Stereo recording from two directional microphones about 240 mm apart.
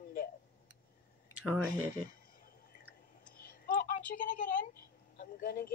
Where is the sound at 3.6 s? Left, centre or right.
Left.